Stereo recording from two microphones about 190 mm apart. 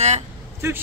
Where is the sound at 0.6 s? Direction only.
15° right (ahead or behind).